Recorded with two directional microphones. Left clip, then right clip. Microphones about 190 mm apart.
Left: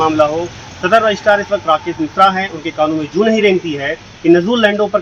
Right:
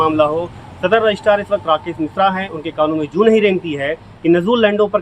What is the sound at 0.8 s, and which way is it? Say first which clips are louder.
Speech: left 2 dB; 30° right (ahead or behind).